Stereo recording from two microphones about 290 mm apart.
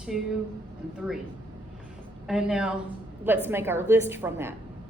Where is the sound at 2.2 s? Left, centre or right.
Centre.